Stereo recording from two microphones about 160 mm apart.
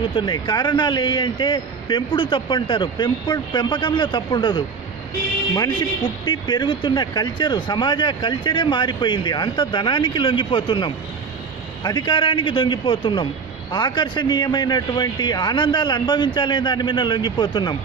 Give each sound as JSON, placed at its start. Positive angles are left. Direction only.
{"t": 0.1, "sound": "speech", "side_deg": 25}